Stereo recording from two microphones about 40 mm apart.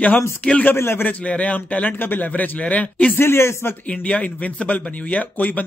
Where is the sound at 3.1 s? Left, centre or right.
Left.